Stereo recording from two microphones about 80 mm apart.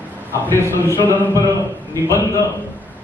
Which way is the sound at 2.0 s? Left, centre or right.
Right.